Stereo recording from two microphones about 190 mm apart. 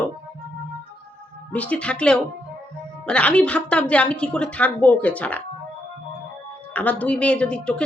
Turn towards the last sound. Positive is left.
turn(degrees=5)  # may be behind; listen again after turning